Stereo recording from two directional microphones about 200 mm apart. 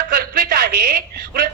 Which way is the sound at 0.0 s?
45° right (ahead or behind).